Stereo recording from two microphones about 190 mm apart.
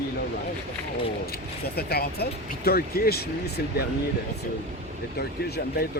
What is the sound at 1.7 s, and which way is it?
Speech, 55° left (ahead or behind).